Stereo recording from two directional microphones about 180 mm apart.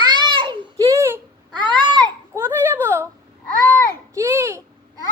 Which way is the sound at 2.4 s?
10° right (ahead or behind).